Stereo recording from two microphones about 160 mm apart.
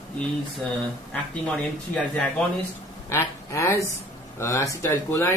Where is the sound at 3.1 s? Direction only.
15° left (ahead or behind).